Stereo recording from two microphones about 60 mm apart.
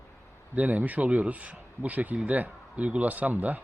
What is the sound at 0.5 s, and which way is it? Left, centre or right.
A man's voice, right.